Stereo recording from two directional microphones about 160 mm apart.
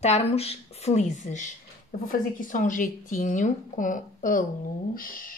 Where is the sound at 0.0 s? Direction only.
40° left (ahead or behind).